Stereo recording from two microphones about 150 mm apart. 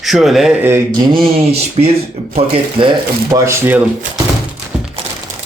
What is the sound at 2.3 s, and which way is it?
Speech, 35° right (ahead or behind).